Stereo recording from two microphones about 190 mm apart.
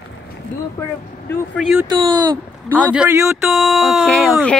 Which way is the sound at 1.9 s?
20° right (ahead or behind).